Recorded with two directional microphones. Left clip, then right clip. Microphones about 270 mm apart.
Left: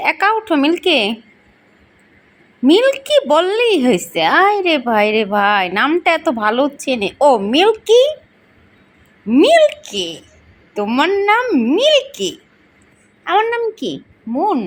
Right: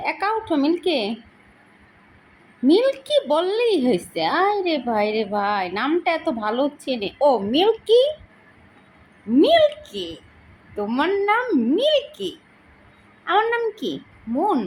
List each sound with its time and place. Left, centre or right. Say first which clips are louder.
0.0 s a woman's voice: left 8 dB; centre
2.7 s a woman's voice: left 6 dB; centre
9.3 s a woman's voice: left 5 dB; centre